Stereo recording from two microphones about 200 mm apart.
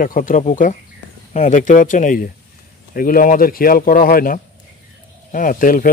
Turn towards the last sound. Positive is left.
turn(degrees=45)  # may be behind; listen again after turning